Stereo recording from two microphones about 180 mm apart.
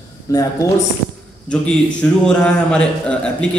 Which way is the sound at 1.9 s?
5° left (ahead or behind).